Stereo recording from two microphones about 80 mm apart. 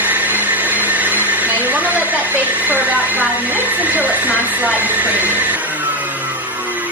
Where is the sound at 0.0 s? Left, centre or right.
Right.